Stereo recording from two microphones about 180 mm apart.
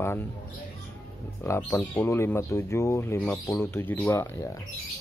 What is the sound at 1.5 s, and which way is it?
Speech, 15° left (ahead or behind).